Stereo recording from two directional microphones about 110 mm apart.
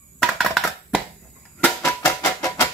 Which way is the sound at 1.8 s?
25° left (ahead or behind).